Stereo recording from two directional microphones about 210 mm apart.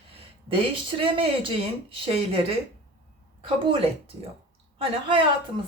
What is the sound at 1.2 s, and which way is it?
Speech, 25° right (ahead or behind).